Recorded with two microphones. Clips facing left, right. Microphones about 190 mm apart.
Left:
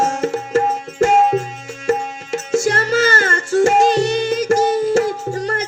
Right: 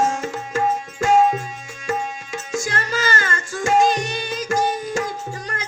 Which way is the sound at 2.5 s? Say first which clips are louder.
Left 9 dB; 45° left (ahead or behind).